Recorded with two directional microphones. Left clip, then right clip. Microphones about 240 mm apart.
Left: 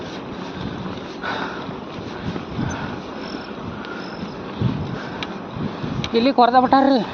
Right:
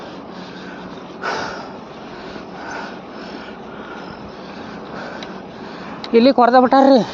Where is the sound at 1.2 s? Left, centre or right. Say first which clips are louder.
Right 3 dB; right.